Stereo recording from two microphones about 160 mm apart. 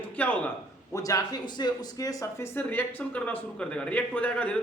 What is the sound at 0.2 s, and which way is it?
Speech, 10° left (ahead or behind).